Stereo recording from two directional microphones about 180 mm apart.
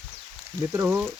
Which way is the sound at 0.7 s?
15° right (ahead or behind).